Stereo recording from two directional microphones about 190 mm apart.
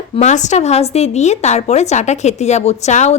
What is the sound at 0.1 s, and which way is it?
A woman's voice, 35° left (ahead or behind).